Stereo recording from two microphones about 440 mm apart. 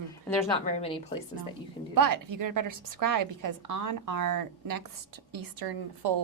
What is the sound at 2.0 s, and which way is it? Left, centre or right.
A woman's voice, right.